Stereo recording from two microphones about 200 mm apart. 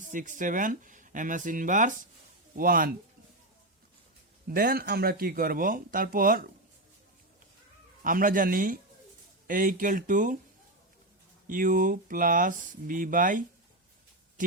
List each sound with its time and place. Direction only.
0.0 s speech: 40° right (ahead or behind)
4.4 s speech: 45° right (ahead or behind)
8.0 s speech: 45° right (ahead or behind)
11.4 s speech: 45° right (ahead or behind)